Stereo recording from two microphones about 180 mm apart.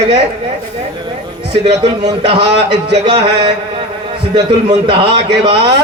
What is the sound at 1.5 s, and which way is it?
Speech, 30° right (ahead or behind).